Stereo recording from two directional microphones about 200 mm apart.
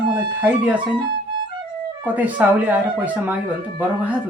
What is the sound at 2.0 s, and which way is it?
Speech, 10° right (ahead or behind).